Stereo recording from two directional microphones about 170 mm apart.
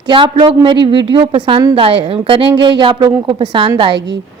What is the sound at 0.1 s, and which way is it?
A man's voice, 30° right (ahead or behind).